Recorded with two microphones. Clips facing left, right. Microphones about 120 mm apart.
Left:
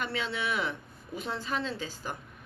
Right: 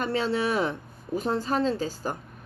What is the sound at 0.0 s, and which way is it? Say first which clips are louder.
Speech: right 7 dB; 40° right (ahead or behind).